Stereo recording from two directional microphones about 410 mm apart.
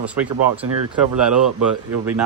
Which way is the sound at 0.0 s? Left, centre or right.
Centre.